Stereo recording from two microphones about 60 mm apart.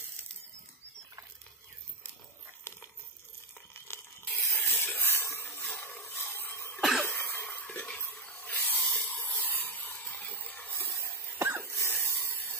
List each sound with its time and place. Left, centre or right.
3.8 s a sound: left
4.6 s rub: left
6.8 s cough: centre
7.1 s cough: left
7.7 s stir: centre
8.3 s spray: left
9.0 s a sound: left
11.3 s cough: right
11.6 s a sound: left